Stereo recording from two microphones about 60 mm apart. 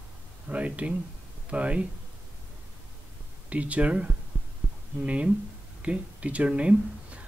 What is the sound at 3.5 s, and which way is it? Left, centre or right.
Speech, right.